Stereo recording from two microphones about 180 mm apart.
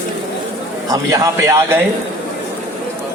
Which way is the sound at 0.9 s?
20° right (ahead or behind).